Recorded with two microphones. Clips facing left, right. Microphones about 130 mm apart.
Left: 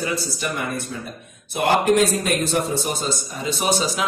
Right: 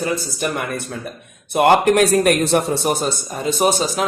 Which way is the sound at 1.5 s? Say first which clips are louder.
Right 4 dB; 65° right (ahead or behind).